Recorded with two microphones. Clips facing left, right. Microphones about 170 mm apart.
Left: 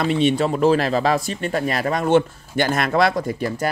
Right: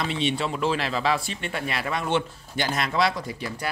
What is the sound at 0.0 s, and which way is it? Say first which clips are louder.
Speech: left 8 dB; 50° left (ahead or behind).